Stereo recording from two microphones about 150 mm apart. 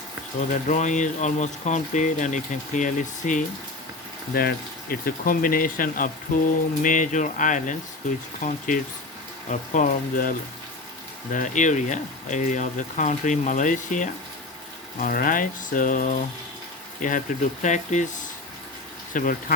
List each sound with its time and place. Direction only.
0.3 s speech: 55° left (ahead or behind)
4.4 s speech: 80° left; by 14.1 s 55° left (ahead or behind)
14.9 s speech: 65° left (ahead or behind)
19.1 s speech: 65° left (ahead or behind)